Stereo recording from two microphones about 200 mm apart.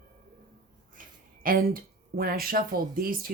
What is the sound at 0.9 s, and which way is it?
Speech, 45° right (ahead or behind).